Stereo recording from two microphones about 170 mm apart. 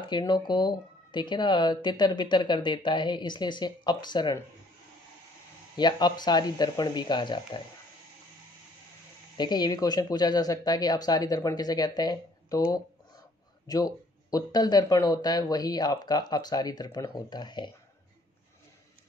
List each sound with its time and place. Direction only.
0.1 s speech: 25° left (ahead or behind)
5.8 s speech: 25° left (ahead or behind)
9.4 s speech: 25° left (ahead or behind)
13.7 s speech: 20° left (ahead or behind)